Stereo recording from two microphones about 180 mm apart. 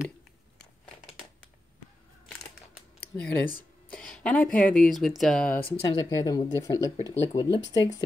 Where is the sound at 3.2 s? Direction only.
10° left (ahead or behind).